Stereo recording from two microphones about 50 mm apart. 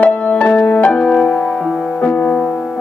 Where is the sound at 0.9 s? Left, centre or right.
Centre.